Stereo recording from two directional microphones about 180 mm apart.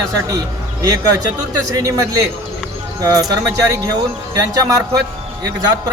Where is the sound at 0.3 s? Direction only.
20° right (ahead or behind).